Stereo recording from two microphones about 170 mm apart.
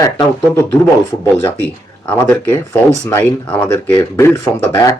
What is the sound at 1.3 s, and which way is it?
Speech, 15° left (ahead or behind).